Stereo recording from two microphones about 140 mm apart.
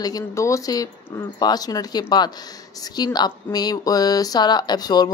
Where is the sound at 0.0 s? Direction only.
25° left (ahead or behind).